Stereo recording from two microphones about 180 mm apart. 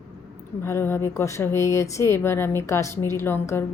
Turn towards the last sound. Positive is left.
turn(degrees=15)  # may be behind; listen again after turning